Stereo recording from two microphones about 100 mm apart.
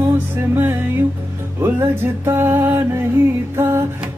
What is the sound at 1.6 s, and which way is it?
Music, 25° right (ahead or behind).